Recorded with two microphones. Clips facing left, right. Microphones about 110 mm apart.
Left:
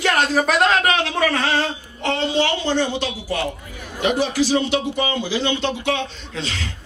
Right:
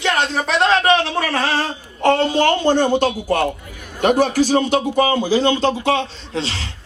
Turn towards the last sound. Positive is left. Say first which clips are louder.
# right 4 dB
turn(degrees=-30)  # may be behind; listen again after turning